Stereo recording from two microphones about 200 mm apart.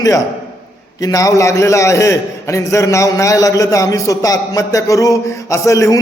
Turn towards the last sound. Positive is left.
turn(degrees=15)  # may be behind; listen again after turning